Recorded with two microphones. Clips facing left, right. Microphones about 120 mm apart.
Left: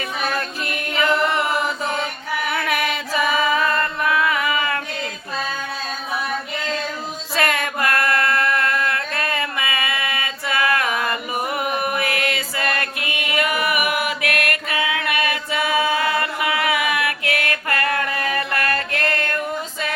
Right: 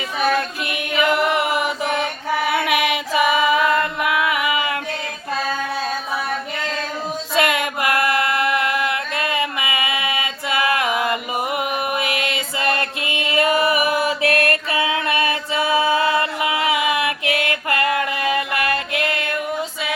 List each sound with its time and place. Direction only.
0.6 s chant: 15° right (ahead or behind)
2.5 s female singing: 15° right (ahead or behind)
7.3 s mantra: 15° right (ahead or behind)